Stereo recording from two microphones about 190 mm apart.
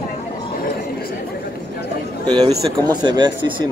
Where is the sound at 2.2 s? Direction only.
25° right (ahead or behind).